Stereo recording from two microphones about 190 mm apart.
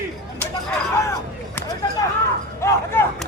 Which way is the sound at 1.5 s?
20° left (ahead or behind).